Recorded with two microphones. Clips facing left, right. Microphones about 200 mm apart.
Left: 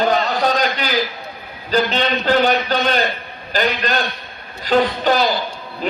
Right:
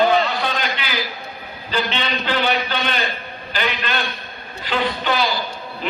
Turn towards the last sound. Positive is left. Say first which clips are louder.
# left 4 dB
turn(degrees=40)  # may be behind; listen again after turning